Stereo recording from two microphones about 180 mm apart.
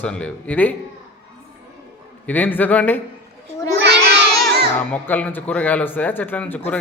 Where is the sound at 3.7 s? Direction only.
70° right (ahead or behind).